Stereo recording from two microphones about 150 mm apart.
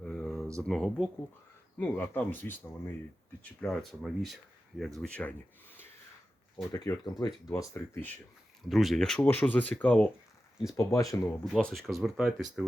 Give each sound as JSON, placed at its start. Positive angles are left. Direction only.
{"t": 0.0, "sound": "a sound", "side_deg": 5}
{"t": 0.7, "sound": "speech", "side_deg": 5}
{"t": 3.6, "sound": "speech", "side_deg": 0}
{"t": 6.7, "sound": "speech", "side_deg": 25}
{"t": 8.7, "sound": "speech", "side_deg": 0}
{"t": 10.8, "sound": "speech", "side_deg": 20}
{"t": 11.3, "sound": "speech", "side_deg": 5}